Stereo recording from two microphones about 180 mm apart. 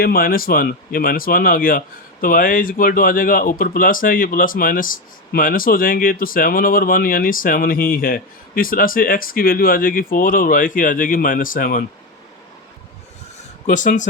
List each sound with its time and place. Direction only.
0.0 s speech: 55° left (ahead or behind)
13.7 s speech: 45° left (ahead or behind)